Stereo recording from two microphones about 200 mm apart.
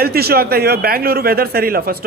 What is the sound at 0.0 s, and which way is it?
A man's voice, 50° right (ahead or behind).